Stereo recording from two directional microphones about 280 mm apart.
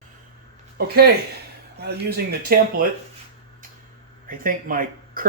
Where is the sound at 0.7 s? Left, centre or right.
Right.